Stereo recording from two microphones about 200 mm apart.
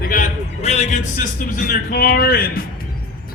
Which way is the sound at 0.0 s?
40° left (ahead or behind).